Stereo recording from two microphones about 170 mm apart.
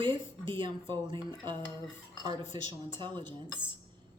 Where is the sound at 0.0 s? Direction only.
30° right (ahead or behind).